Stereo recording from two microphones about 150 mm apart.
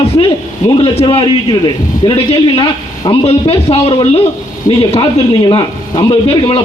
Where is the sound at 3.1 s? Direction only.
40° left (ahead or behind).